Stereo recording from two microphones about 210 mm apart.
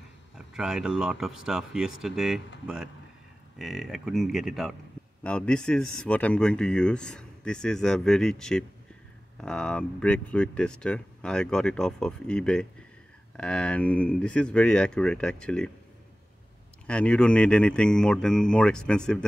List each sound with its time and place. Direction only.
0.6 s speech: 5° right (ahead or behind)
16.8 s speech: 5° left (ahead or behind)